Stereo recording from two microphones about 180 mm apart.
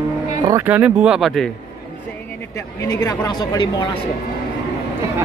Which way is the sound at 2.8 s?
20° left (ahead or behind).